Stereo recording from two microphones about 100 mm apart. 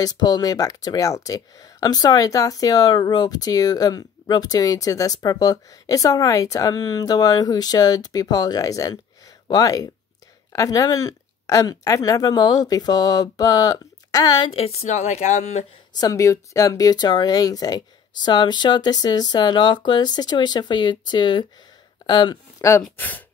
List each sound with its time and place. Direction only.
0.0 s speech: 40° left (ahead or behind)
14.5 s a woman's voice: 90° left
16.0 s speech: 35° left (ahead or behind); by 22.4 s 50° left (ahead or behind)
22.6 s speech: 30° left (ahead or behind)
22.9 s speech: 15° left (ahead or behind)